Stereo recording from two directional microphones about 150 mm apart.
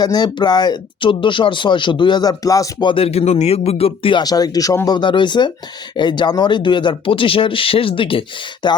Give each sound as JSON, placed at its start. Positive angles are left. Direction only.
{"t": 0.0, "sound": "speech", "side_deg": 25}
{"t": 2.9, "sound": "speech", "side_deg": 40}